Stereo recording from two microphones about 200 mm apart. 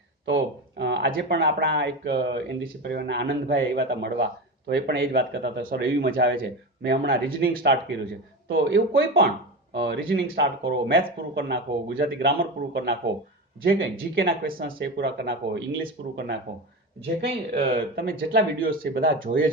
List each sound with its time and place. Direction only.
0.3 s speech: 60° right (ahead or behind)
17.5 s speech: 50° right (ahead or behind)